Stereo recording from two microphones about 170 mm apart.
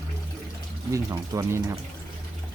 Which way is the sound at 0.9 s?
20° right (ahead or behind).